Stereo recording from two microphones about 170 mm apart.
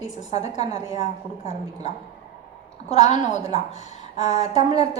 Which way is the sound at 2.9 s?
40° left (ahead or behind).